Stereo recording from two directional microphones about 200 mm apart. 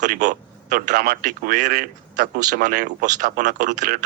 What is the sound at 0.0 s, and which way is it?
Speech, 40° right (ahead or behind).